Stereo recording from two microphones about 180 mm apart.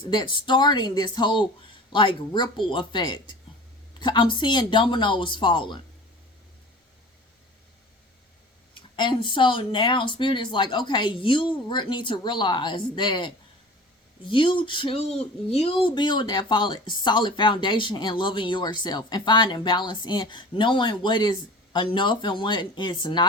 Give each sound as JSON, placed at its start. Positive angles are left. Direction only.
{"t": 0.0, "sound": "speech", "side_deg": 25}
{"t": 8.7, "sound": "speech", "side_deg": 25}